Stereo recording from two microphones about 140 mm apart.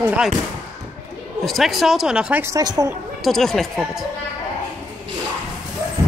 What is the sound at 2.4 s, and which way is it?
Speech, 25° right (ahead or behind).